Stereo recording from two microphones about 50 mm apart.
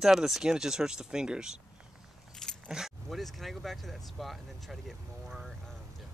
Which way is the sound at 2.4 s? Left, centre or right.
Centre.